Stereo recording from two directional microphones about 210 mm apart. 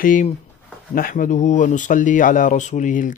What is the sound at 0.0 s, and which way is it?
Speech, 40° left (ahead or behind).